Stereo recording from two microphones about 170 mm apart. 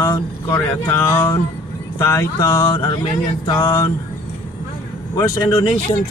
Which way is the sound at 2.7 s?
30° left (ahead or behind).